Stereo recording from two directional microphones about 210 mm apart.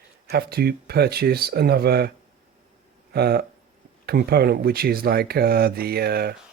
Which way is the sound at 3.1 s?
50° right (ahead or behind).